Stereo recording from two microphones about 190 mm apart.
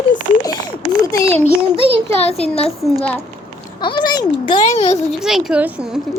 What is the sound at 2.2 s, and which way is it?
Speech, 30° left (ahead or behind).